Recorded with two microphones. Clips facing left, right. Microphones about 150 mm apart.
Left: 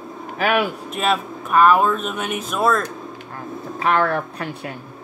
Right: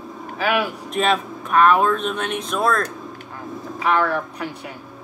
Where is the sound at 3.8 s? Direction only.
55° left (ahead or behind).